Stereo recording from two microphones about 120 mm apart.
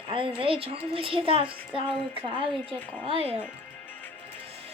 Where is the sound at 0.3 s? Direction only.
50° right (ahead or behind).